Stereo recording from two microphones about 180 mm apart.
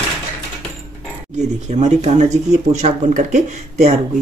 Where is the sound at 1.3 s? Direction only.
40° right (ahead or behind).